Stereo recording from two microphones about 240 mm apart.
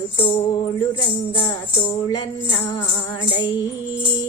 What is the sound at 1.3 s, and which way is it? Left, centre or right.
Music, centre.